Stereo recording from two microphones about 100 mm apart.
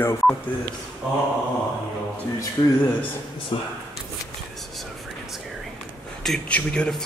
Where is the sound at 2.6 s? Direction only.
50° left (ahead or behind).